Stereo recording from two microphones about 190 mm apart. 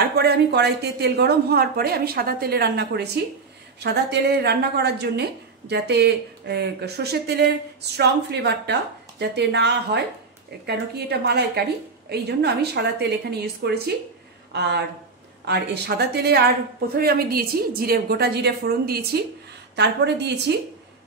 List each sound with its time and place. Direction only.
0.1 s speech: 60° right (ahead or behind)